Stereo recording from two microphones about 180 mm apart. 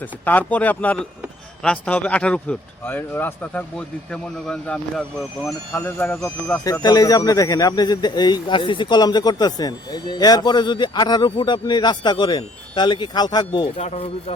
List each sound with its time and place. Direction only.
0.0 s speech: 10° left (ahead or behind)
6.2 s speech: 15° left (ahead or behind)
13.7 s speech: 35° left (ahead or behind)